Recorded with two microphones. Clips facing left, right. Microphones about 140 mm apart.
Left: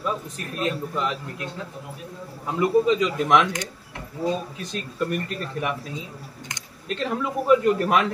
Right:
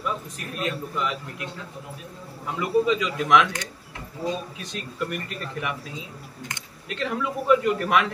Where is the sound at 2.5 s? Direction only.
35° left (ahead or behind).